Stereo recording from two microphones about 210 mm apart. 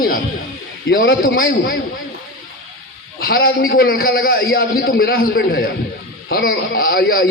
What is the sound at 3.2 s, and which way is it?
A man's voice, 45° left (ahead or behind).